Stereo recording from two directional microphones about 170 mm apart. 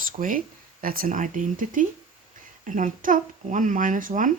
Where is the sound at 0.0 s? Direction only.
55° right (ahead or behind).